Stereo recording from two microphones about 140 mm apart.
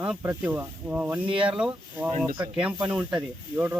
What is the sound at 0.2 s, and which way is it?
Speech, 15° right (ahead or behind).